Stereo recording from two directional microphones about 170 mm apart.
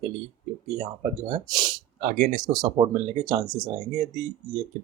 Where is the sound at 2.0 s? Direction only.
55° right (ahead or behind).